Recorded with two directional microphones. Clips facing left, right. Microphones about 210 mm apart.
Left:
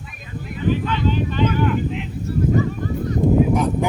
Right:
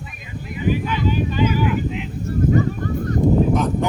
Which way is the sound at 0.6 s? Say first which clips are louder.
Even; 10° right (ahead or behind).